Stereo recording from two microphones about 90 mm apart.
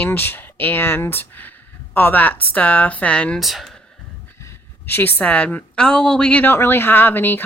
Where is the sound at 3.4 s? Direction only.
Centre (ahead or behind).